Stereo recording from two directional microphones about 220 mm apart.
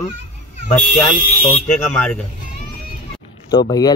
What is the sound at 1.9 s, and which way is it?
Speech, 5° left (ahead or behind).